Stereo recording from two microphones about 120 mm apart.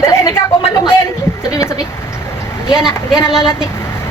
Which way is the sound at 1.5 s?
30° left (ahead or behind).